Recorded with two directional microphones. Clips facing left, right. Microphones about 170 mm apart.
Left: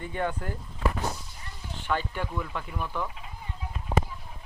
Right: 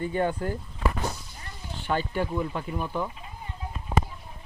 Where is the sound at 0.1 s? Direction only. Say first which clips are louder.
Right 4 dB; 30° right (ahead or behind).